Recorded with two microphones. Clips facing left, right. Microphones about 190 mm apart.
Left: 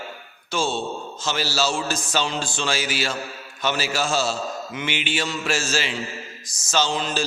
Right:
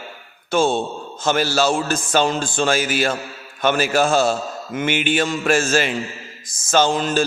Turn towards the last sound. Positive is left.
turn(degrees=-50)  # may be behind; listen again after turning